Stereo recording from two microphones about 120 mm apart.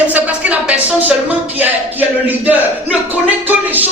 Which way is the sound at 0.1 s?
10° right (ahead or behind).